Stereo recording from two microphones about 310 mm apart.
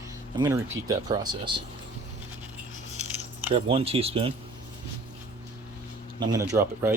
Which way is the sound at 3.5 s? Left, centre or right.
Centre.